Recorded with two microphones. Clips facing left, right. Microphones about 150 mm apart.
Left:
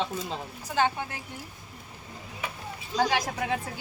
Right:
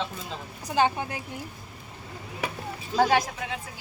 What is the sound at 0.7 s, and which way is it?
Speech, 15° right (ahead or behind).